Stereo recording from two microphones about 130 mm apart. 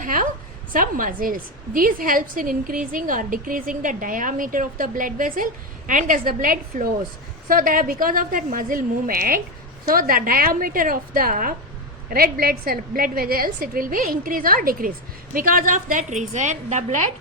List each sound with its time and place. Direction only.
0.0 s a sound: 90° right
0.7 s a woman's voice: 90° right
13.0 s a woman's voice: 90° right; by 17.0 s 65° right (ahead or behind)